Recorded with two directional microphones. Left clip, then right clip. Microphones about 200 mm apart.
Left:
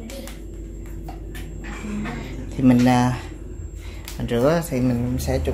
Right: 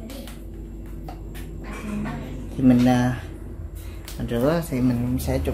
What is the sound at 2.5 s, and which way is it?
Speech, 15° left (ahead or behind).